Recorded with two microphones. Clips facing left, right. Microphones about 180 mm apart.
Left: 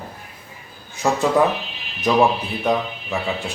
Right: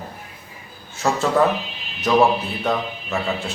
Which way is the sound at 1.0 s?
15° left (ahead or behind).